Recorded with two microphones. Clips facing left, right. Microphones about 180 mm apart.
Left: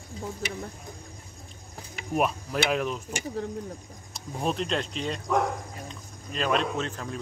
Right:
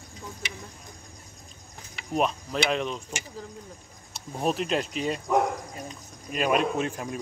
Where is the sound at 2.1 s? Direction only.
5° left (ahead or behind).